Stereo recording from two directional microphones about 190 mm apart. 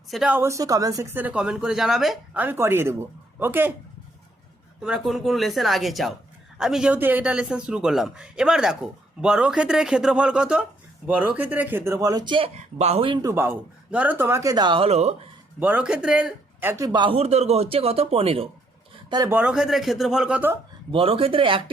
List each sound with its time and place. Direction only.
0.1 s speech: 5° right (ahead or behind)
4.8 s speech: centre (ahead or behind); by 12.5 s 25° right (ahead or behind)
12.5 s speech: 35° right (ahead or behind)
13.2 s speech: 10° right (ahead or behind); by 15.1 s 35° right (ahead or behind)
15.6 s a man's voice: 5° right (ahead or behind); by 18.4 s 30° right (ahead or behind)
19.1 s a man's voice: 20° right (ahead or behind)
19.4 s speech: 5° right (ahead or behind)
20.9 s a man's voice: 30° right (ahead or behind)